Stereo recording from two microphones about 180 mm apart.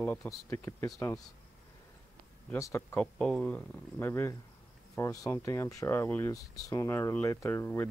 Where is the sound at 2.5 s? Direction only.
15° left (ahead or behind).